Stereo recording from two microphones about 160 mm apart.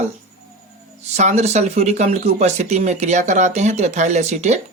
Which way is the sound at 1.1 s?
45° right (ahead or behind).